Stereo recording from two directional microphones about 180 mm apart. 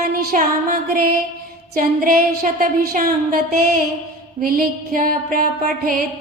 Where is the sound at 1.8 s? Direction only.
50° right (ahead or behind).